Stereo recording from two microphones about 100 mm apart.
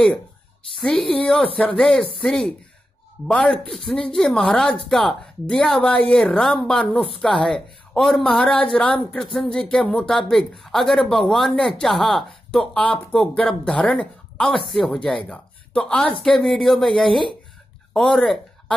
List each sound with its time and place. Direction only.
0.7 s a woman's voice: 5° left (ahead or behind)
3.3 s a woman's voice: 10° left (ahead or behind)